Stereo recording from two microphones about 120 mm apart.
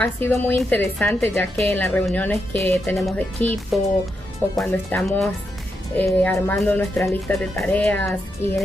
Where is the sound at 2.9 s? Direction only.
Centre (ahead or behind).